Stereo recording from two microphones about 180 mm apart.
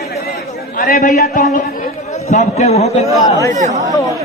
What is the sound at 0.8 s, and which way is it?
A man's voice, 50° left (ahead or behind).